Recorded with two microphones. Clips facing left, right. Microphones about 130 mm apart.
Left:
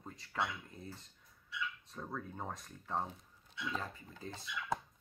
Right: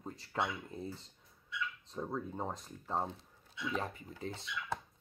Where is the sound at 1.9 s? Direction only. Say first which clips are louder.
Right 5 dB; 20° right (ahead or behind).